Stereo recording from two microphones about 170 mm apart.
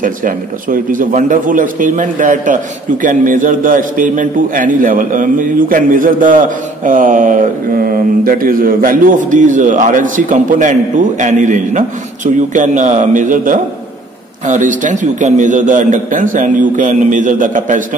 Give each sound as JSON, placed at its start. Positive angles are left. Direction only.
{"t": 0.0, "sound": "a man's voice", "side_deg": -55}